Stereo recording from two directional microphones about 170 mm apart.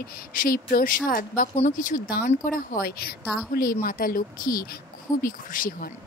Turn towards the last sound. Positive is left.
turn(degrees=55)  # may be behind; listen again after turning